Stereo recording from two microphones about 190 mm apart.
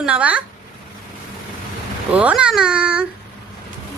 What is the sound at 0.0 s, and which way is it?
Speech, 5° right (ahead or behind).